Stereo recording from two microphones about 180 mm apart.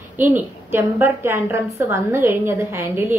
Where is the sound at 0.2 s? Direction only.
10° right (ahead or behind).